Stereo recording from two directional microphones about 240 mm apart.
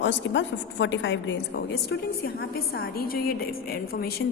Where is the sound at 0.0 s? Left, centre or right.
Left.